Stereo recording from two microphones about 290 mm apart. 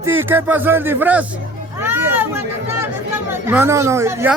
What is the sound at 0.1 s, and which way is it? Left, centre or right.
Speech, centre.